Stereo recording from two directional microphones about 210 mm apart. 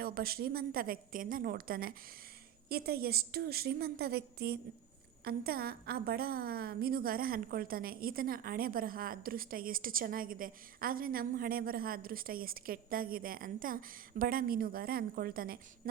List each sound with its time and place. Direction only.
0.0 s a woman's voice: 45° right (ahead or behind)